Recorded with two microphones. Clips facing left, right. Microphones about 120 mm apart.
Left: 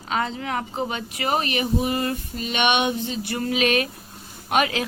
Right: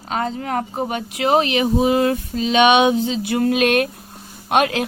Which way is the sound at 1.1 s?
80° right.